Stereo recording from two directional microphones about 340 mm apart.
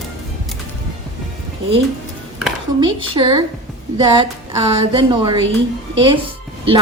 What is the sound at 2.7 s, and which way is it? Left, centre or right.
A woman's voice, centre.